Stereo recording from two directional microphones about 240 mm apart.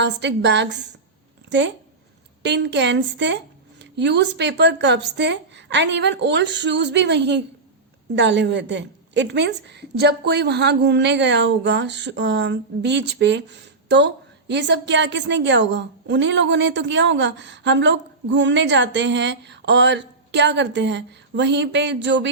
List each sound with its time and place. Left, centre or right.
0.0 s a woman's voice: right